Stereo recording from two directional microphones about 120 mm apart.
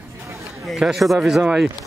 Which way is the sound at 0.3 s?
25° right (ahead or behind).